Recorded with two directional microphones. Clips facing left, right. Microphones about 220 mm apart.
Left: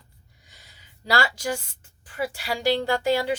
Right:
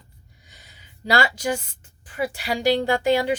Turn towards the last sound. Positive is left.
turn(degrees=-20)  # may be behind; listen again after turning